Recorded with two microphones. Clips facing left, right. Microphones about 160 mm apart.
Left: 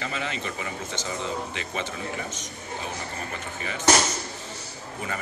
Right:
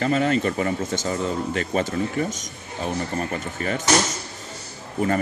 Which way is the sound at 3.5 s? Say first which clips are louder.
Right 9 dB; 50° right (ahead or behind).